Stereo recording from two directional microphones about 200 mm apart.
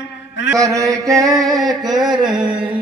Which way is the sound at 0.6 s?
15° right (ahead or behind).